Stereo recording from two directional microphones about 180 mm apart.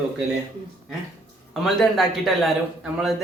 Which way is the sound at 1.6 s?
Centre (ahead or behind).